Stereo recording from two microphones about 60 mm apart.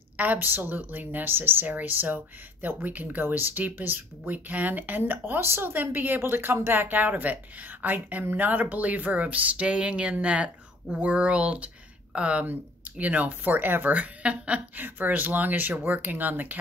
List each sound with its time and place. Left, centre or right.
0.2 s speech: right
13.9 s speech: right
14.8 s speech: right